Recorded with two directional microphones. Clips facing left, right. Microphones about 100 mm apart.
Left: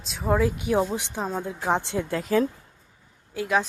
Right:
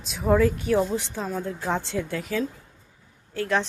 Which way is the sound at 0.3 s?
10° left (ahead or behind).